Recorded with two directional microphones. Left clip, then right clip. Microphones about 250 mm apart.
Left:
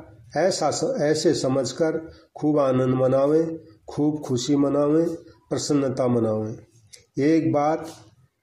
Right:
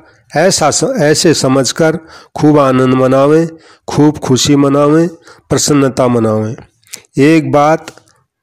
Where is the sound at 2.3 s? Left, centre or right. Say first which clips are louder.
Right 13 dB; right.